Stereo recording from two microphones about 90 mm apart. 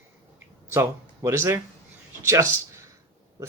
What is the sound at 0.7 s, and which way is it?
A man's voice, 30° right (ahead or behind).